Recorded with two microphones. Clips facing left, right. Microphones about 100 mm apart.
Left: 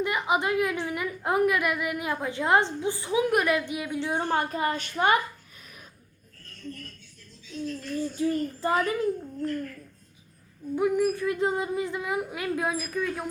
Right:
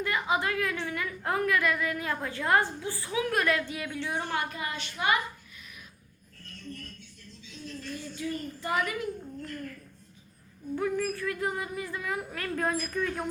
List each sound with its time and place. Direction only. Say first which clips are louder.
0.0 s a woman's voice: left 3 dB; 20° left (ahead or behind)
4.4 s a child's voice: left 6 dB; 40° left (ahead or behind)
7.9 s a child's voice: left 9 dB; 35° left (ahead or behind)
10.8 s speech: left 6 dB; 15° left (ahead or behind)